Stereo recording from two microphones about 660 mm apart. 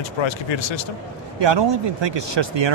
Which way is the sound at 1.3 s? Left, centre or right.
Right.